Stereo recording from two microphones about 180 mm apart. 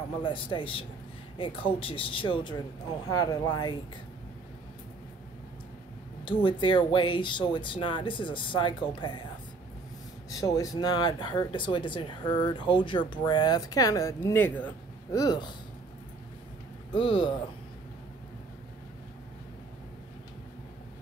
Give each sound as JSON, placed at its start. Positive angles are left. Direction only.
{"t": 0.2, "sound": "speech", "side_deg": 25}
{"t": 6.2, "sound": "speech", "side_deg": 25}
{"t": 10.3, "sound": "speech", "side_deg": 20}
{"t": 15.1, "sound": "speech", "side_deg": 25}
{"t": 16.9, "sound": "speech", "side_deg": 30}